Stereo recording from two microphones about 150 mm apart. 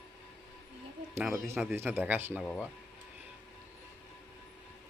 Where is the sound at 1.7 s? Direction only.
15° right (ahead or behind).